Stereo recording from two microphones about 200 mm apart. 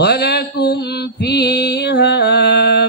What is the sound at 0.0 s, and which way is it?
Mantra, 55° left (ahead or behind).